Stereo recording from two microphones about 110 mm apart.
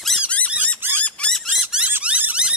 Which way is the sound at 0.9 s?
10° left (ahead or behind).